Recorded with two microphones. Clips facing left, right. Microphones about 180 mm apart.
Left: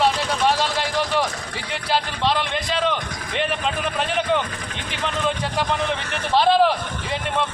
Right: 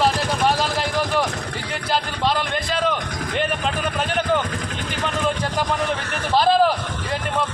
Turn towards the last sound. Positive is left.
turn(degrees=0)  # may be behind; listen again after turning